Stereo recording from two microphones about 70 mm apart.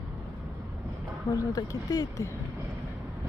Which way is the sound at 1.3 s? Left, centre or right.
Left.